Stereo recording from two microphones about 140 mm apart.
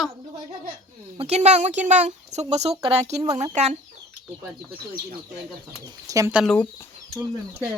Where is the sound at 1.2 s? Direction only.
50° right (ahead or behind).